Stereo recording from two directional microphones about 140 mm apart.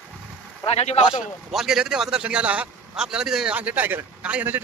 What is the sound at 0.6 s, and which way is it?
Speech, 50° left (ahead or behind).